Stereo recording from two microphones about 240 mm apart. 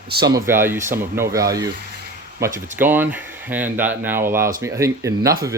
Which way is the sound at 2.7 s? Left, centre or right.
Centre.